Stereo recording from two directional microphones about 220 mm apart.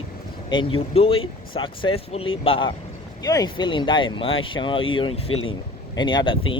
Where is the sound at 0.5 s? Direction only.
25° left (ahead or behind).